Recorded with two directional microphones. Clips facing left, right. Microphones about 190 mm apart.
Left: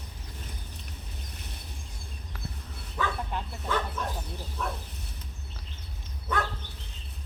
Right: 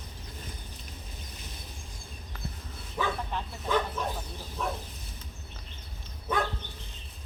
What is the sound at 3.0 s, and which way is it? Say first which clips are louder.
Speech: even; 15° right (ahead or behind).